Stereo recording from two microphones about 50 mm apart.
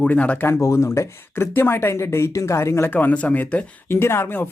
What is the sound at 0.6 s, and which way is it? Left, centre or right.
Speech, left.